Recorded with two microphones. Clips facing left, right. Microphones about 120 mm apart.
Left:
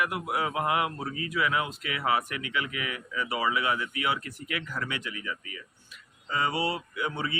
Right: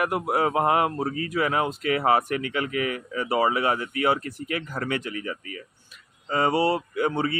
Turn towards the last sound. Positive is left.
turn(degrees=-45)  # may be behind; listen again after turning